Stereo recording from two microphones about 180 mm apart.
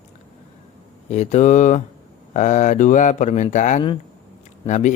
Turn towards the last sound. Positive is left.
turn(degrees=40)  # may be behind; listen again after turning